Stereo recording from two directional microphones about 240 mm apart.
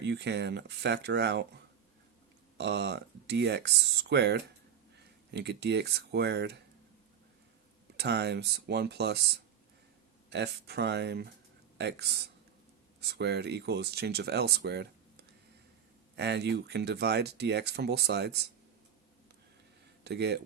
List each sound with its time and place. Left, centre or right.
0.0 s speech: right
2.6 s speech: right
7.9 s speech: right
10.2 s speech: right
16.1 s speech: right
20.1 s speech: right